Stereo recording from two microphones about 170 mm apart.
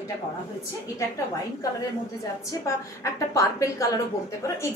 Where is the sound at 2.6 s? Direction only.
20° left (ahead or behind).